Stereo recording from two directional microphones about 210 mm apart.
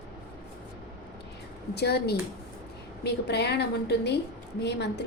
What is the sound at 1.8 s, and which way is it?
A woman's voice, 50° left (ahead or behind).